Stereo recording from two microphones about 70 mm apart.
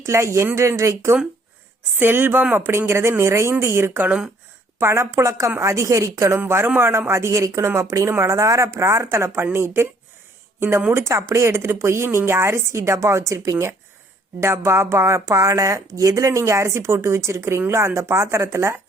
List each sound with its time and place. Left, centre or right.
0.0 s speech: right
2.0 s a woman's voice: right
6.7 s a woman's voice: right